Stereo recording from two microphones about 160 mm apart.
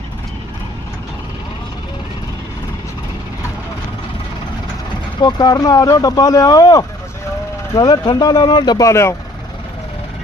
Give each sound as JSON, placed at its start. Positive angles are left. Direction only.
{"t": 5.2, "sound": "speech", "side_deg": 25}